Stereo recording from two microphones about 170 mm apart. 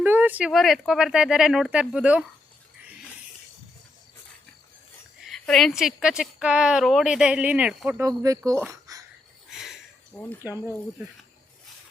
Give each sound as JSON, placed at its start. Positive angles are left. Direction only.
{"t": 0.0, "sound": "a woman's voice", "side_deg": -10}
{"t": 5.3, "sound": "a woman's voice", "side_deg": 0}
{"t": 8.0, "sound": "speech", "side_deg": -20}
{"t": 9.5, "sound": "a sound", "side_deg": 0}
{"t": 10.4, "sound": "speech", "side_deg": -10}